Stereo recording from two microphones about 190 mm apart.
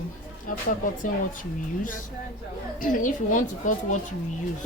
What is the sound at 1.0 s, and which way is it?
A woman's voice, 45° left (ahead or behind).